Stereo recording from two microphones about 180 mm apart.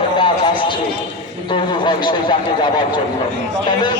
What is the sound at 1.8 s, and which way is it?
Speech, 25° left (ahead or behind).